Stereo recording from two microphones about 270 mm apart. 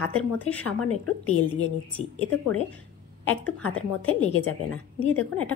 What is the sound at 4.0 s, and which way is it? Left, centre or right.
A woman's voice, left.